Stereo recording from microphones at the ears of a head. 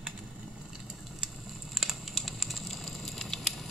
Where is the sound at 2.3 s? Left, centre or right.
Centre.